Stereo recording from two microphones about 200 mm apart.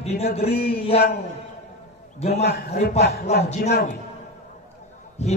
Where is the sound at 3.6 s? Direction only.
50° left (ahead or behind).